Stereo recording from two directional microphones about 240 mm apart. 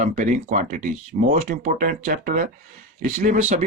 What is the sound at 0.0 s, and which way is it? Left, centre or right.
Speech, right.